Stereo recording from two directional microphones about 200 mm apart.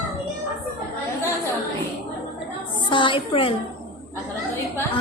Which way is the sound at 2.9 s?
25° left (ahead or behind).